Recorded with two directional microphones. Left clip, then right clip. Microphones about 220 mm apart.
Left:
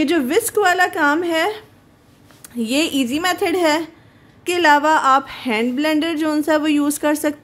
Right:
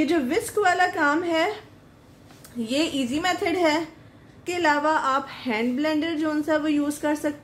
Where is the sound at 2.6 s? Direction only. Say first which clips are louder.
Left 6 dB; 45° left (ahead or behind).